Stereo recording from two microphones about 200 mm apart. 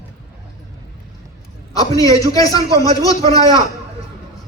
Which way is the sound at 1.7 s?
20° left (ahead or behind).